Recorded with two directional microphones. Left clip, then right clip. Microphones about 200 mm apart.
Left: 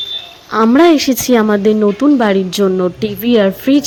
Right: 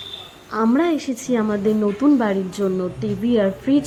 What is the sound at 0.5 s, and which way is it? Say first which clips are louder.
A woman's voice: left 10 dB; 20° left (ahead or behind).